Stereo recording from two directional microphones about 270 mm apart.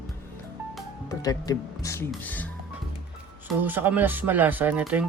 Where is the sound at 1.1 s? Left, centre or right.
Centre.